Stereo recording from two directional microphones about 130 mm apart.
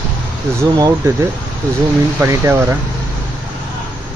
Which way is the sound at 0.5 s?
25° right (ahead or behind).